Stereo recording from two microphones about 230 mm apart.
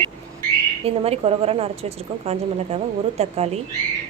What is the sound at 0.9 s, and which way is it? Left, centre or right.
A woman's voice, right.